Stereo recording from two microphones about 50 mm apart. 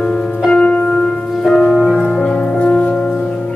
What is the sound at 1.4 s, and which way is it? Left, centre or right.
Music, centre.